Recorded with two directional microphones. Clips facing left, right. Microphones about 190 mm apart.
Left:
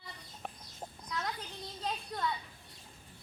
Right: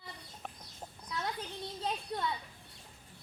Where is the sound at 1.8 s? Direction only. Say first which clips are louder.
Right 1 dB; 20° right (ahead or behind).